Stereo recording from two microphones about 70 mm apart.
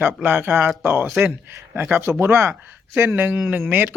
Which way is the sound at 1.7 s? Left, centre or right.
Right.